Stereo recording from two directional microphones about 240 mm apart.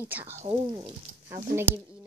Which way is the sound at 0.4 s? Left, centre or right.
Right.